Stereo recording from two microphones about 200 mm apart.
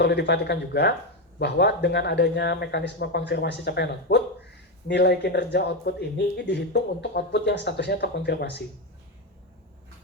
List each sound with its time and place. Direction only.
0.0 s speech: 55° left (ahead or behind)